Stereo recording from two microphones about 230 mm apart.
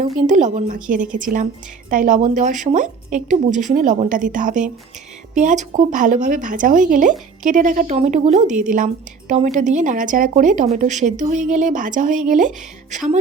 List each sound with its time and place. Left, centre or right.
0.3 s speech: right